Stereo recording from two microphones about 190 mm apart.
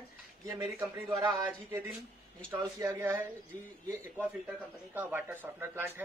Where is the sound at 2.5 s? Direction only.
15° right (ahead or behind).